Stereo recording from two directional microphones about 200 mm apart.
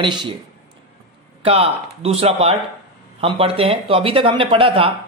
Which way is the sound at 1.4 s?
30° right (ahead or behind).